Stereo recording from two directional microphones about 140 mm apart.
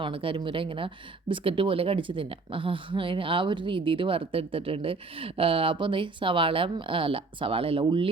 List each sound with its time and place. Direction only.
0.0 s a woman's voice: 40° right (ahead or behind)